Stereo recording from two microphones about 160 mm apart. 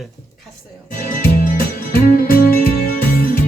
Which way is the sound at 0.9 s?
60° left (ahead or behind).